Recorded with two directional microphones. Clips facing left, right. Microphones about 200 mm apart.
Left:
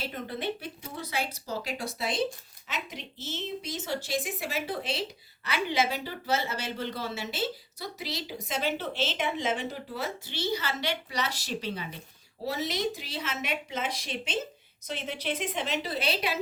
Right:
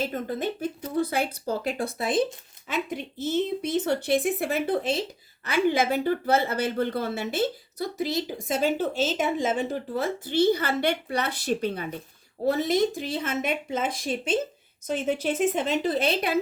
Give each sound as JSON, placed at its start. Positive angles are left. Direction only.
{"t": 0.0, "sound": "a woman's voice", "side_deg": -45}